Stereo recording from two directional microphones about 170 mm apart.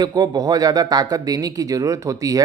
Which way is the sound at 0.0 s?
20° right (ahead or behind).